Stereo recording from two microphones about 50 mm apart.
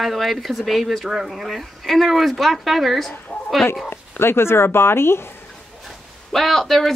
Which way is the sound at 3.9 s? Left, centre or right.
Left.